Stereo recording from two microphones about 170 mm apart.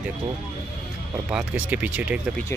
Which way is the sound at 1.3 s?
5° right (ahead or behind).